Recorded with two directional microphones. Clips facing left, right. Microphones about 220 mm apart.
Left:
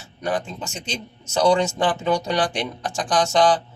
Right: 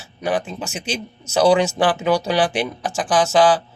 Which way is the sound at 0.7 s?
85° right.